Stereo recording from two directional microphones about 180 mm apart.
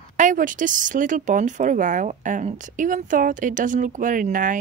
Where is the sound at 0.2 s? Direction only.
45° right (ahead or behind).